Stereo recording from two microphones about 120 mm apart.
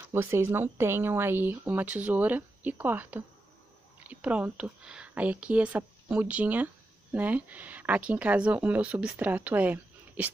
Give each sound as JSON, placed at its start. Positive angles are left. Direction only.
{"t": 0.1, "sound": "a woman's voice", "side_deg": -20}